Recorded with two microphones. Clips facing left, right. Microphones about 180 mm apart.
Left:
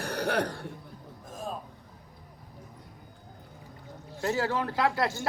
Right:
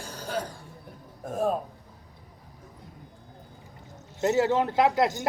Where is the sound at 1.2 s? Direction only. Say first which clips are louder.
Right 11 dB; 65° right (ahead or behind).